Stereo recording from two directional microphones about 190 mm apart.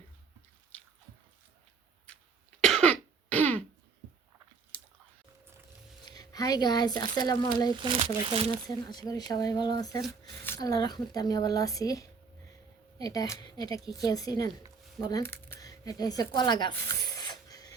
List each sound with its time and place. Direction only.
2.6 s cough: centre (ahead or behind)
2.9 s throat clearing: 10° left (ahead or behind)
6.1 s speech: 20° left (ahead or behind)
7.8 s speech: 25° right (ahead or behind)
8.6 s speech: 20° left (ahead or behind)
15.0 s a sound: 15° left (ahead or behind)